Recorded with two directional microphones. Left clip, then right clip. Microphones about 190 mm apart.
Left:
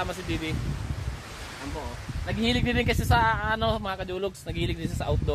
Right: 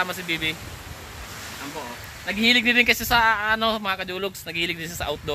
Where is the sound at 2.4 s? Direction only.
20° left (ahead or behind).